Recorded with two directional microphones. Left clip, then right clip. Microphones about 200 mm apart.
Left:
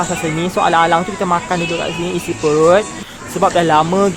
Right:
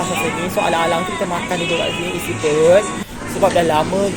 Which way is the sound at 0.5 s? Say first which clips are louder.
Left 5 dB; 25° left (ahead or behind).